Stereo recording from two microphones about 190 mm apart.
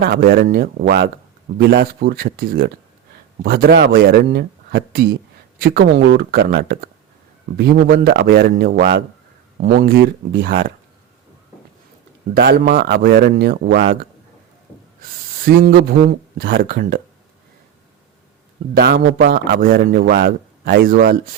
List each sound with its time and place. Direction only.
0.0 s a man's voice: 50° right (ahead or behind)
12.3 s a man's voice: 55° right (ahead or behind)
15.4 s speech: 55° right (ahead or behind)
18.7 s a man's voice: 55° right (ahead or behind)